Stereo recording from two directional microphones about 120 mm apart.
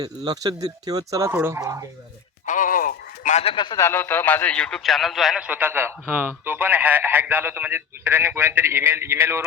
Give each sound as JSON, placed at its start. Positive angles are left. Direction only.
{"t": 0.0, "sound": "speech", "side_deg": -35}
{"t": 1.3, "sound": "speech", "side_deg": -15}
{"t": 2.5, "sound": "a sound", "side_deg": 90}
{"t": 3.4, "sound": "speech", "side_deg": 45}
{"t": 3.8, "sound": "a man's voice", "side_deg": 20}